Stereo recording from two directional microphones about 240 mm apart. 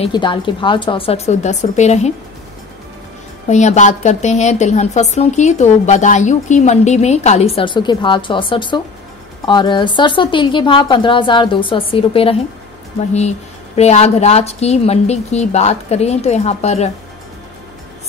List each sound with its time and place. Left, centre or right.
0.0 s a woman's voice: centre
3.4 s a woman's voice: left
13.7 s a woman's voice: left